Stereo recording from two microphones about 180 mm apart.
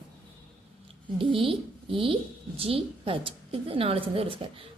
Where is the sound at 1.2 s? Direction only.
30° right (ahead or behind).